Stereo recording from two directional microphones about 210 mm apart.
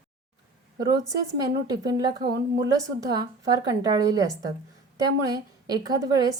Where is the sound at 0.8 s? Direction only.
15° right (ahead or behind).